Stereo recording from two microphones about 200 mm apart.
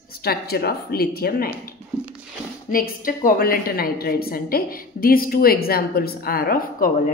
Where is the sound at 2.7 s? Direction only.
45° left (ahead or behind).